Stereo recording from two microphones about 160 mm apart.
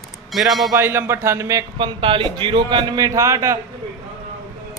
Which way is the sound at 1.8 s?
35° right (ahead or behind).